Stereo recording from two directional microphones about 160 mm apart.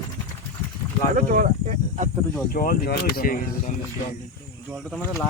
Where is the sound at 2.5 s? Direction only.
65° left (ahead or behind).